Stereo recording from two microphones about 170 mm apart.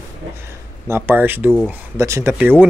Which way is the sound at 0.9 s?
10° right (ahead or behind).